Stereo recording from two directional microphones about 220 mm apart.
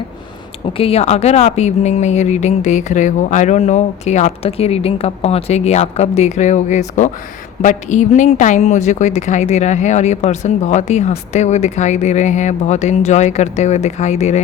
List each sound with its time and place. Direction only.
0.8 s speech: 25° left (ahead or behind)